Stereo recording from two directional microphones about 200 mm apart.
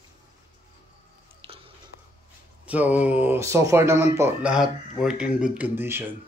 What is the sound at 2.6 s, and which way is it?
Speech, 5° right (ahead or behind).